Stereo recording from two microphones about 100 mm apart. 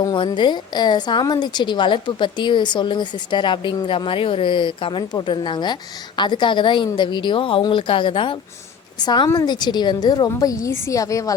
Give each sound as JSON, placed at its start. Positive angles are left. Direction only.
{"t": 0.0, "sound": "a woman's voice", "side_deg": 50}
{"t": 9.0, "sound": "a woman's voice", "side_deg": 45}